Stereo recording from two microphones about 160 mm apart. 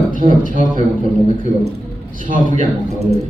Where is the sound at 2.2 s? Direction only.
55° right (ahead or behind).